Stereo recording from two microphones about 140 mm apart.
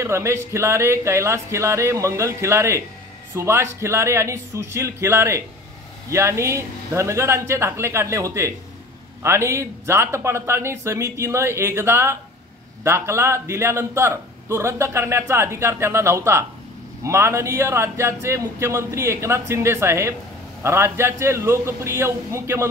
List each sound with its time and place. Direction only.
0.0 s a man's voice: 20° right (ahead or behind)